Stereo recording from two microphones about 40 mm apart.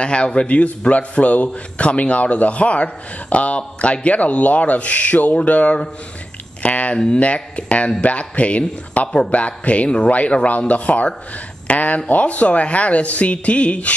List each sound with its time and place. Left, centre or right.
0.0 s a man's voice: left
6.6 s a sound: left
7.2 s a man's voice: left